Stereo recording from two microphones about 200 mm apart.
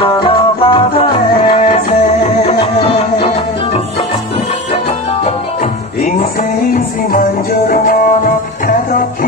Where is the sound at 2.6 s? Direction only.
30° left (ahead or behind).